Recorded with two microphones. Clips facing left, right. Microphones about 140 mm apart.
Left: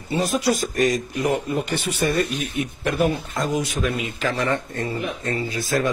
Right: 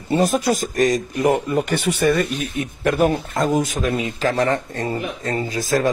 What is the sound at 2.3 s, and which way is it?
Speech, 45° right (ahead or behind).